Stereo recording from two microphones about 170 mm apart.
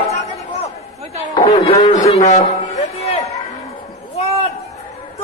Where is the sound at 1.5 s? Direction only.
40° left (ahead or behind).